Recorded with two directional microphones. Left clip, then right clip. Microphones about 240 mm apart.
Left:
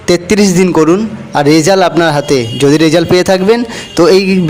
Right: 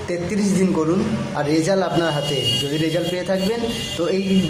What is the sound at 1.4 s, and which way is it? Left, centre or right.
A man's voice, left.